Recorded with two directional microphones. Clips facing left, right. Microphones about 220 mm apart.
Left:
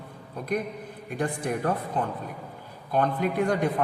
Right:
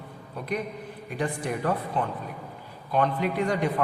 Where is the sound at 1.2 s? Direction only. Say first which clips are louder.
Left 1 dB; 50° left (ahead or behind).